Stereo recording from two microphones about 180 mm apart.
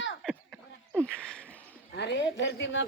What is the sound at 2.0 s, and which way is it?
Speech, 75° left (ahead or behind).